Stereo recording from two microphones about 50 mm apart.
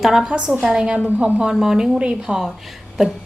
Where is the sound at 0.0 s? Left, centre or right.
Centre.